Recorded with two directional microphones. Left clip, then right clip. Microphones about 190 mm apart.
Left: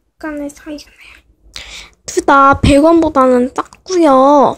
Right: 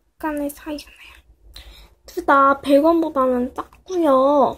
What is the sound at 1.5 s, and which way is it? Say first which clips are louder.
Speech: left 15 dB; 30° left (ahead or behind).